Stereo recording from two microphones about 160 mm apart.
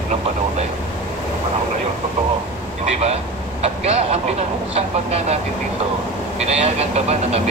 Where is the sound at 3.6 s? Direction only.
40° right (ahead or behind).